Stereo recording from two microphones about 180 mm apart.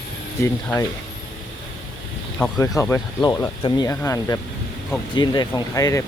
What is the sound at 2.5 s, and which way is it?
Speech, 20° left (ahead or behind).